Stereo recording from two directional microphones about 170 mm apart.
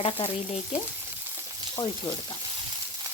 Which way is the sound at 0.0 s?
35° left (ahead or behind).